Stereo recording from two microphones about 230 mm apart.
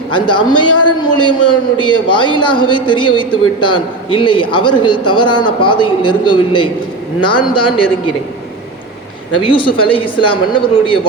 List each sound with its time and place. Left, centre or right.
0.1 s a man's voice: left
9.4 s a man's voice: left